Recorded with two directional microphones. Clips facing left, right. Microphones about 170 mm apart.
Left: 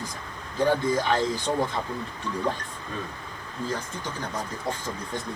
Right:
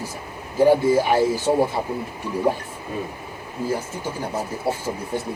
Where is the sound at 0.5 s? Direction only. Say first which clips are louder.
Right 7 dB; 10° right (ahead or behind).